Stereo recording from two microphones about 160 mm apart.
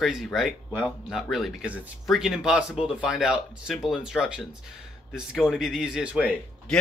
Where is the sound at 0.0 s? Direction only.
Centre (ahead or behind).